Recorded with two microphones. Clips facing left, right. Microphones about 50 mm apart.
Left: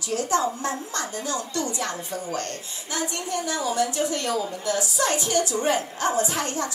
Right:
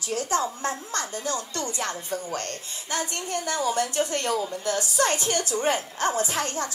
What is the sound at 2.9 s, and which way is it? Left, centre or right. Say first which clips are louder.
A woman's voice: left 1 dB; right.